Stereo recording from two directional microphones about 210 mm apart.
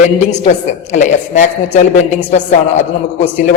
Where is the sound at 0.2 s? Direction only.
35° left (ahead or behind).